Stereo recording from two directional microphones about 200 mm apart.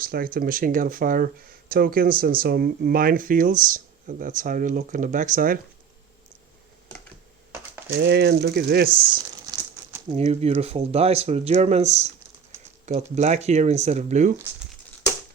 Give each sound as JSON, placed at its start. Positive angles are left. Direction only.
{"t": 0.0, "sound": "speech", "side_deg": -45}
{"t": 7.9, "sound": "speech", "side_deg": -55}
{"t": 8.9, "sound": "speech", "side_deg": -25}